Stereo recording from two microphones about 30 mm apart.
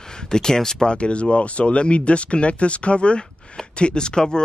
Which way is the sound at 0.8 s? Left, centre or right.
Left.